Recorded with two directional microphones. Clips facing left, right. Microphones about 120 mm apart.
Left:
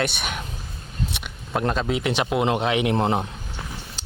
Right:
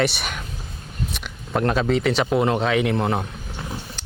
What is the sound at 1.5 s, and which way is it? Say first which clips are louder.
Speech: right 3 dB; centre (ahead or behind).